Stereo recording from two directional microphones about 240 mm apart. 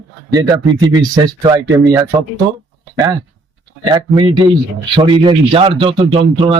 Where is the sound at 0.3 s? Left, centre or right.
Centre.